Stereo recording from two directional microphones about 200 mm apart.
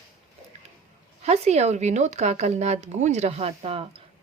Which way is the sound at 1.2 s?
30° right (ahead or behind).